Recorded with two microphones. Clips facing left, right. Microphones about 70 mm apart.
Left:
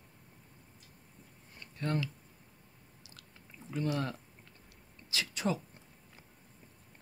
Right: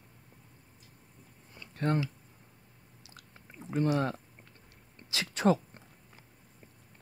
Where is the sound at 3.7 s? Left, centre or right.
Right.